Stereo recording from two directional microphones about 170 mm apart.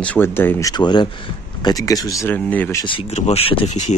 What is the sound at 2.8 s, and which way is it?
Speech, 30° left (ahead or behind).